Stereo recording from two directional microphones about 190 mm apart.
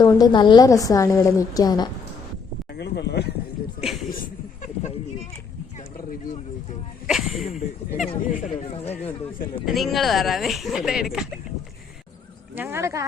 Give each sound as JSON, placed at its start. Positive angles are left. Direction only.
{"t": 0.0, "sound": "a woman's voice", "side_deg": 20}
{"t": 2.7, "sound": "speech", "side_deg": 60}
{"t": 3.8, "sound": "speech", "side_deg": 0}
{"t": 5.7, "sound": "a sound", "side_deg": 40}
{"t": 7.1, "sound": "speech", "side_deg": 0}
{"t": 8.0, "sound": "speech", "side_deg": 35}
{"t": 9.0, "sound": "a man's voice", "side_deg": 10}
{"t": 12.5, "sound": "speech", "side_deg": -10}